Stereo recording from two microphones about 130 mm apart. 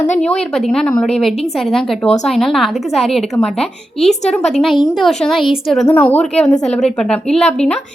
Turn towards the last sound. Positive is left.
turn(degrees=5)  # may be behind; listen again after turning